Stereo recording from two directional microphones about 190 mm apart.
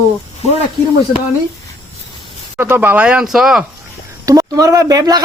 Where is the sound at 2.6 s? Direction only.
10° right (ahead or behind).